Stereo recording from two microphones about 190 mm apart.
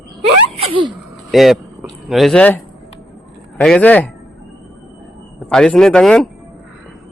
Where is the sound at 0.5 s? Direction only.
30° right (ahead or behind).